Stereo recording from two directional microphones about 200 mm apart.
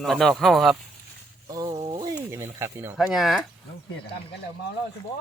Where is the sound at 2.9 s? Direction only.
Centre (ahead or behind).